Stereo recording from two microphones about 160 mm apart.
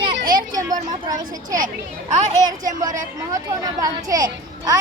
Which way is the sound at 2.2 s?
55° right (ahead or behind).